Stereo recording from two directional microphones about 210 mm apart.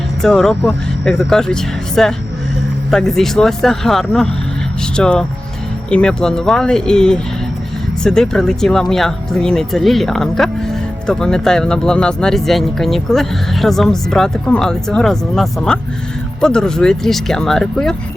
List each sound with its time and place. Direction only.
0.2 s speech: centre (ahead or behind)